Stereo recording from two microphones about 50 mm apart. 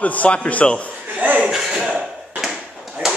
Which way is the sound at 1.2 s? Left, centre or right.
Right.